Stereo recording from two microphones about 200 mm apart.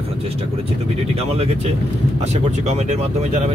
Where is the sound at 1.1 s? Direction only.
30° right (ahead or behind).